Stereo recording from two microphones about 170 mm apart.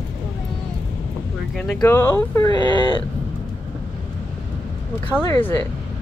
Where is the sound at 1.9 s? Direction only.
15° left (ahead or behind).